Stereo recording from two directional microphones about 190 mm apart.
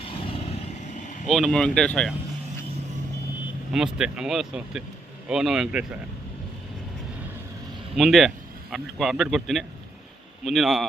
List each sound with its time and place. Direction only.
0.0 s vehicle: 30° left (ahead or behind)
1.3 s speech: centre (ahead or behind)
3.7 s speech: 5° right (ahead or behind)
7.9 s speech: centre (ahead or behind)